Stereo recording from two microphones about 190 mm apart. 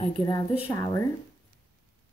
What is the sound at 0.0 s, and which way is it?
A woman's voice, 25° left (ahead or behind).